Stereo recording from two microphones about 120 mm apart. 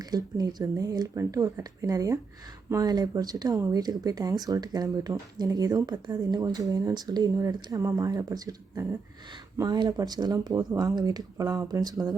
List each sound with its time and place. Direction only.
0.0 s speech: 35° right (ahead or behind)